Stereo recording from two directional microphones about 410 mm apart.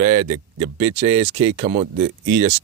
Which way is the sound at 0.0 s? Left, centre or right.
Centre.